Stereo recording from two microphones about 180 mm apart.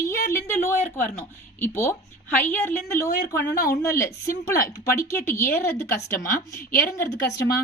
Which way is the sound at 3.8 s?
15° left (ahead or behind).